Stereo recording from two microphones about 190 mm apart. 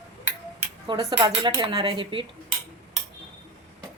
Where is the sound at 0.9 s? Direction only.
20° right (ahead or behind).